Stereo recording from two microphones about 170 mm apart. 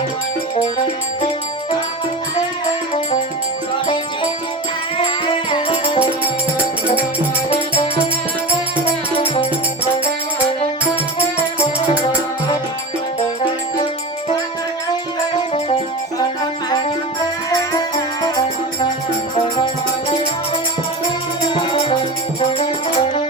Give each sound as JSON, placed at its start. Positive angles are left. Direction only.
{"t": 3.8, "sound": "music", "side_deg": 30}
{"t": 8.8, "sound": "music", "side_deg": 35}
{"t": 15.4, "sound": "music", "side_deg": 30}
{"t": 21.5, "sound": "music", "side_deg": 30}